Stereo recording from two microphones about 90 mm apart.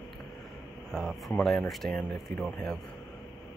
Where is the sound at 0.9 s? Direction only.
Centre (ahead or behind).